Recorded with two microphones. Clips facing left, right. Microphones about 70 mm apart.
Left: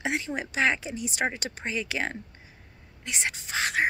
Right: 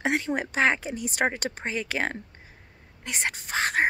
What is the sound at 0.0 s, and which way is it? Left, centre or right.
A woman's voice, right.